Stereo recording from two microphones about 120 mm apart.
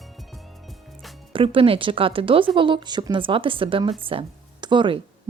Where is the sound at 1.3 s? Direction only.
45° right (ahead or behind).